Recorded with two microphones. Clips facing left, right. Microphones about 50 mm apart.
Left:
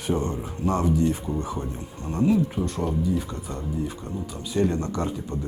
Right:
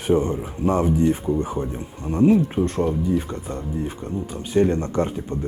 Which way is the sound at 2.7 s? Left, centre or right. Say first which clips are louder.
Right 4 dB; right.